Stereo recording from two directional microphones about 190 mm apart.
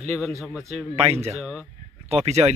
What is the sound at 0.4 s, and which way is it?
Speech, centre (ahead or behind).